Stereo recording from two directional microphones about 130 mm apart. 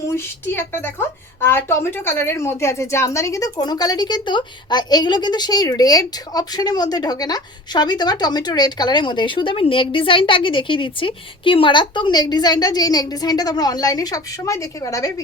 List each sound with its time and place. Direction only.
0.1 s a woman's voice: 15° left (ahead or behind)